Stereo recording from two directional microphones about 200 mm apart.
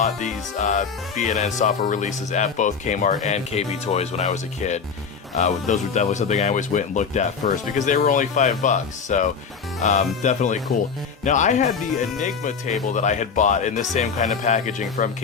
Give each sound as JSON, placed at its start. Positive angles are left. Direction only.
{"t": 0.0, "sound": "speech", "side_deg": 35}